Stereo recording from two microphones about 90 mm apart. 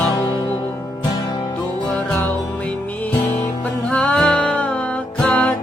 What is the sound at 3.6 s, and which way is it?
Music, 15° left (ahead or behind).